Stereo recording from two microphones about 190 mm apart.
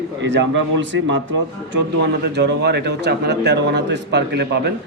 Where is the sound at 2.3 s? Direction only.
60° right (ahead or behind).